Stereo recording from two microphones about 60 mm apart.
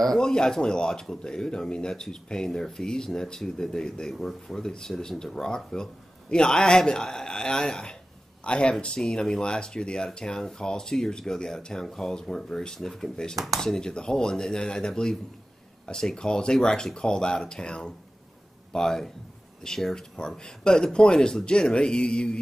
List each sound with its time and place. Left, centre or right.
0.0 s speech: centre